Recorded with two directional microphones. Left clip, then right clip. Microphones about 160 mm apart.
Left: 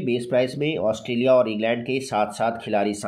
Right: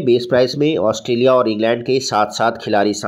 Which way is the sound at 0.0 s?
45° right (ahead or behind).